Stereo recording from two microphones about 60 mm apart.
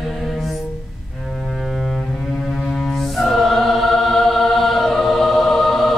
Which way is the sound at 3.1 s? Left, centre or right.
Centre.